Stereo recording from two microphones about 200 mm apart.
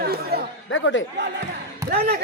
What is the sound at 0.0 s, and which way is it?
Chatter, 50° right (ahead or behind).